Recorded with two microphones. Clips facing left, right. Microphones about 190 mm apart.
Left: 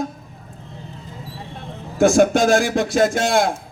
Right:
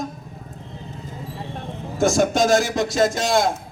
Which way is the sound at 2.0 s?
55° left (ahead or behind).